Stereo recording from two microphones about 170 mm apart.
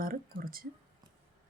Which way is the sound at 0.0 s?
55° right (ahead or behind).